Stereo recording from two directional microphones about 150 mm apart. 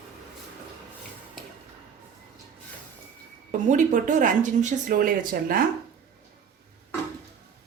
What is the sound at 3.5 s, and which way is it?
Speech, 55° right (ahead or behind).